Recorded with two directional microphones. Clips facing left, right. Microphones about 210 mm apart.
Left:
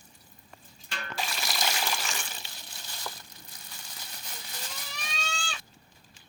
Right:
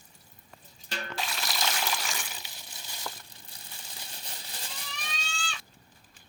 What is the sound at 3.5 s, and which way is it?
Crumpling, 35° right (ahead or behind).